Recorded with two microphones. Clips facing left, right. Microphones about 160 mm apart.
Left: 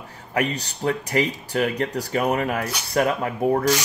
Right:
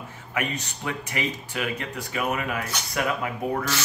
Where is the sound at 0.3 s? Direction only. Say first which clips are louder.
Left 5 dB; 40° left (ahead or behind).